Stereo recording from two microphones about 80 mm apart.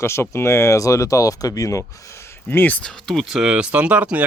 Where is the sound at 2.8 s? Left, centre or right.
Centre.